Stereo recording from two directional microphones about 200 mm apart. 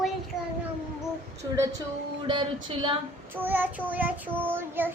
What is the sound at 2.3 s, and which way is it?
Speech, 25° right (ahead or behind).